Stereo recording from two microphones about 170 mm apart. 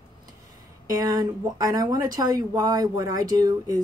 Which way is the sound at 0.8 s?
20° right (ahead or behind).